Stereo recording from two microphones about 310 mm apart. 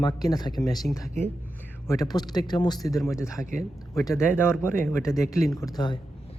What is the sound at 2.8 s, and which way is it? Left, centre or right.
Speech, centre.